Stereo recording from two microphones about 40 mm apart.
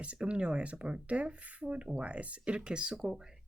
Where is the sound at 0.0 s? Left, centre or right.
Right.